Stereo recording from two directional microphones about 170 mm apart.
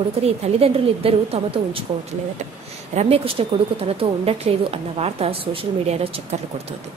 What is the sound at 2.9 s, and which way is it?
A woman's voice, 35° right (ahead or behind).